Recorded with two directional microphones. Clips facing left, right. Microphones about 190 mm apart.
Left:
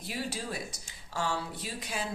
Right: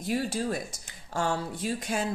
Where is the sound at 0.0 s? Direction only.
45° right (ahead or behind).